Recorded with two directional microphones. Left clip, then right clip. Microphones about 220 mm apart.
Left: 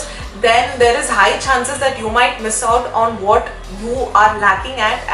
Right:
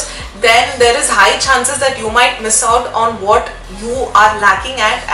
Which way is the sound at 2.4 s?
15° left (ahead or behind).